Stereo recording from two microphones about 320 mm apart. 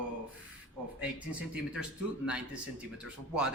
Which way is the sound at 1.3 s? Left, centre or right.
Centre.